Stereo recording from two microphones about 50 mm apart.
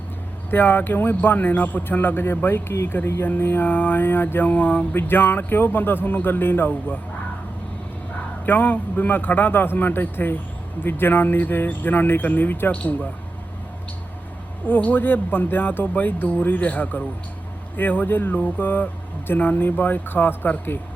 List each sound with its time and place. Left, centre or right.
0.5 s a man's voice: left
8.4 s a man's voice: left
12.7 s speech: left
14.8 s a man's voice: left